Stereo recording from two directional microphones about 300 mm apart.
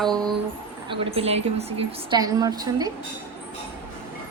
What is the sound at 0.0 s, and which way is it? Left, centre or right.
Speech, centre.